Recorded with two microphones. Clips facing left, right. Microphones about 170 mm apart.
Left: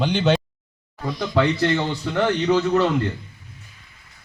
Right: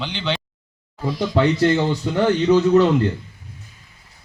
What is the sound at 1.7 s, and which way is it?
A man's voice, 15° right (ahead or behind).